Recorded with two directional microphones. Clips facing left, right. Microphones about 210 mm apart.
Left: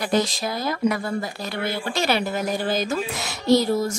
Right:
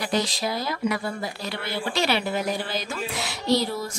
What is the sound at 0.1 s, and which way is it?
Speech, 50° left (ahead or behind).